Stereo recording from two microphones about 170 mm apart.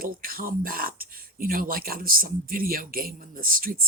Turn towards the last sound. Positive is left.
turn(degrees=-60)  # may be behind; listen again after turning